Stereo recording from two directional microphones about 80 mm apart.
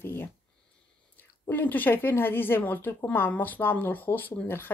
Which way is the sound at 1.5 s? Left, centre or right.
Left.